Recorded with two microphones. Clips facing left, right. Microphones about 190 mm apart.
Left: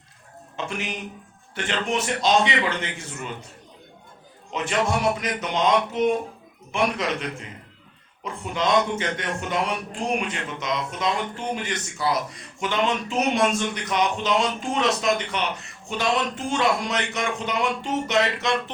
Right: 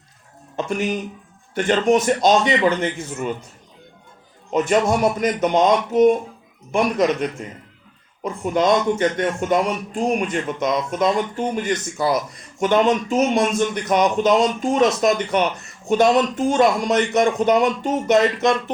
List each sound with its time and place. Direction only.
0.5 s speech: 45° right (ahead or behind)
4.5 s speech: 45° right (ahead or behind)